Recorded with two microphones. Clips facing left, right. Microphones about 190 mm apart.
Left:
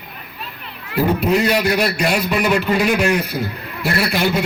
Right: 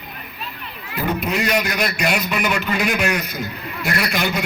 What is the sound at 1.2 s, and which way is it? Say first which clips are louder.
A man's voice: left 3 dB; 35° left (ahead or behind).